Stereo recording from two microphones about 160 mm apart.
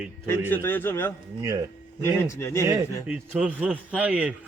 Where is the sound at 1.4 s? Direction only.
20° right (ahead or behind).